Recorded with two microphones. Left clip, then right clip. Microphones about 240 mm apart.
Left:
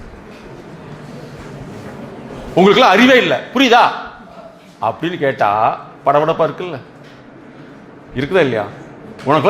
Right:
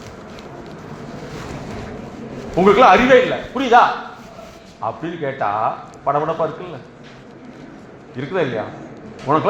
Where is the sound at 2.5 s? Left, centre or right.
Left.